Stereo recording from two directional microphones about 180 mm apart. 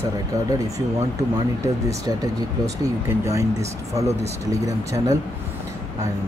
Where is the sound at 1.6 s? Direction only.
15° right (ahead or behind).